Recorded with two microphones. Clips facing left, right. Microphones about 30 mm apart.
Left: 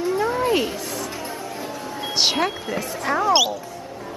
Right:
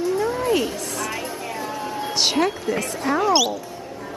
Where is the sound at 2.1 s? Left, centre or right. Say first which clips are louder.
Even; centre.